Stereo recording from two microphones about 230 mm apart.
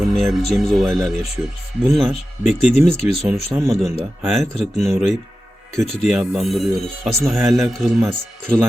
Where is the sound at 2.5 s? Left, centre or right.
Left.